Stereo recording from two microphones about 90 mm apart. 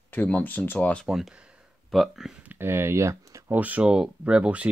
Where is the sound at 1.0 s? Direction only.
5° right (ahead or behind).